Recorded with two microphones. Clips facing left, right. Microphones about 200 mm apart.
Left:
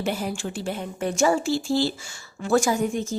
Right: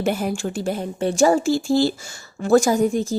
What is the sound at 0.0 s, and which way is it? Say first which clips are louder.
A woman's voice: right 5 dB; 50° right (ahead or behind).